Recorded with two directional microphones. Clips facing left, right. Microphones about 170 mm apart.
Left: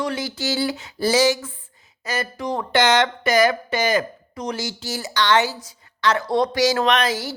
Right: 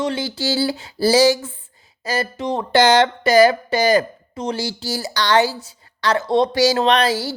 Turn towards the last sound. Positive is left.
turn(degrees=-30)  # may be behind; listen again after turning